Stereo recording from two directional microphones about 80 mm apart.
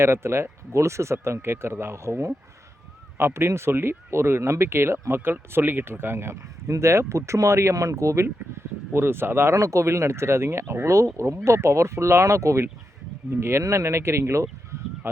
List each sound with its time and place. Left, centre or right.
0.0 s speech: right